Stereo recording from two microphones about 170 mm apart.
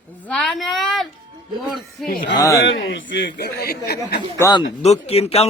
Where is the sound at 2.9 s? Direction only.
90° left; by 3.9 s 65° left (ahead or behind).